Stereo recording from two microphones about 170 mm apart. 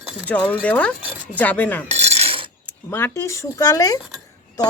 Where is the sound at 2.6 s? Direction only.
15° left (ahead or behind).